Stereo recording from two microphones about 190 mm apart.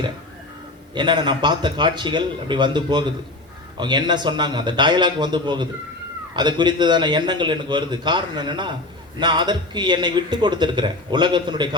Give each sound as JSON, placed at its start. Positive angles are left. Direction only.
{"t": 0.9, "sound": "a man's voice", "side_deg": -25}